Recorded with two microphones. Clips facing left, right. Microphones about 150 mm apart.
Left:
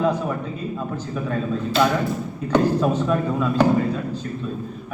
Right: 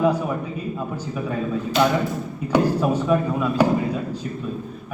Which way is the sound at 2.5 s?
10° right (ahead or behind).